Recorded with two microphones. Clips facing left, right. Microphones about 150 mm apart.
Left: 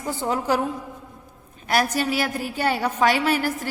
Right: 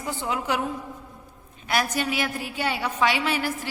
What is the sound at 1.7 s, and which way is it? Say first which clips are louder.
A woman's voice: left 3 dB; 40° left (ahead or behind).